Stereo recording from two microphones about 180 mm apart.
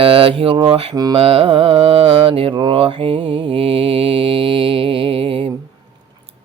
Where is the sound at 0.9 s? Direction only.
20° right (ahead or behind).